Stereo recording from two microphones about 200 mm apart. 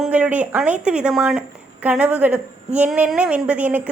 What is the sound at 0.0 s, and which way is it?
Speech, 5° right (ahead or behind).